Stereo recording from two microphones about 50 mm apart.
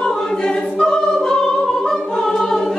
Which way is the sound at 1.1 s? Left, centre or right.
Centre.